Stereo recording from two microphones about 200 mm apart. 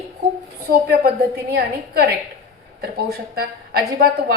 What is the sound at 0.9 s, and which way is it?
A woman's voice, 50° right (ahead or behind).